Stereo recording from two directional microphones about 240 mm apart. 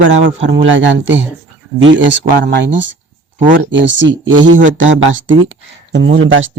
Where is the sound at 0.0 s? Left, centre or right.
Right.